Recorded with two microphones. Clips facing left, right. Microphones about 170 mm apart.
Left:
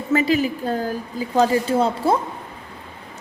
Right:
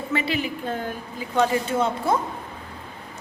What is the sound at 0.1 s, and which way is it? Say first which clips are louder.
A woman's voice: left 8 dB; 40° left (ahead or behind).